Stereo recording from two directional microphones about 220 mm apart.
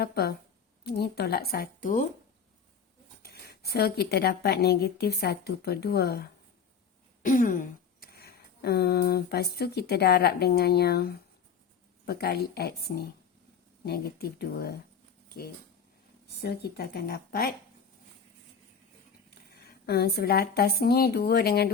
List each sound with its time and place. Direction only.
0.0 s speech: 45° left (ahead or behind)
3.2 s speech: 45° left (ahead or behind)
7.2 s a sound: 35° left (ahead or behind)
12.0 s speech: 45° left (ahead or behind)
16.2 s speech: 45° left (ahead or behind)
19.3 s speech: 45° left (ahead or behind)